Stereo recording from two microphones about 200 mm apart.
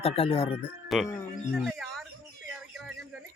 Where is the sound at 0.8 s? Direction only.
Centre (ahead or behind).